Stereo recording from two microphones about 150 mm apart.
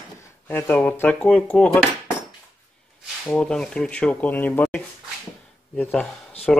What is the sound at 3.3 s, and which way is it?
Speech, 10° left (ahead or behind).